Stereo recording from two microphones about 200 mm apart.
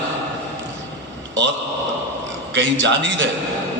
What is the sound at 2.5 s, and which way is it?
Speech, 65° right (ahead or behind).